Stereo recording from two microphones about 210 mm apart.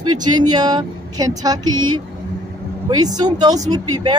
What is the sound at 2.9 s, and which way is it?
Speech, 20° right (ahead or behind).